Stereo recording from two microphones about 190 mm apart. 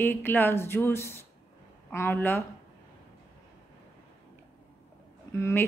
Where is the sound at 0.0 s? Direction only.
10° left (ahead or behind).